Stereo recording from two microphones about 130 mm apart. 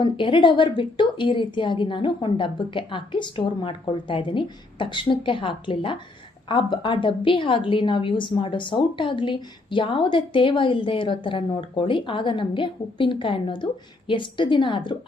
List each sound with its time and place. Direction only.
0.0 s a woman's voice: 40° left (ahead or behind)